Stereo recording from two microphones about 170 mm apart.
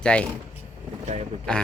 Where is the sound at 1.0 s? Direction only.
40° right (ahead or behind).